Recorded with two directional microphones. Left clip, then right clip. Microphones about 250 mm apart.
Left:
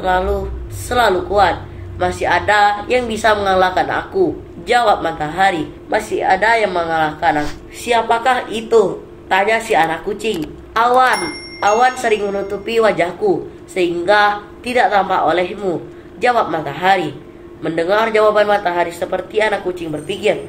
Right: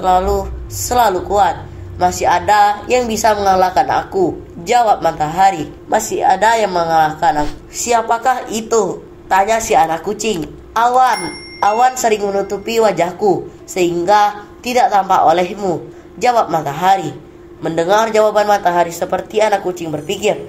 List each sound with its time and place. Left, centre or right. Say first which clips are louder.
0.0 s a woman's voice: right 3 dB; right